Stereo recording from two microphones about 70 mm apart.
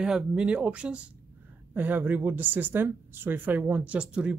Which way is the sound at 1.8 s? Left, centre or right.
Right.